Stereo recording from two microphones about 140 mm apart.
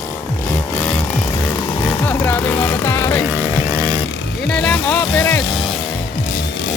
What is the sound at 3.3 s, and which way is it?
Vehicle, 15° right (ahead or behind).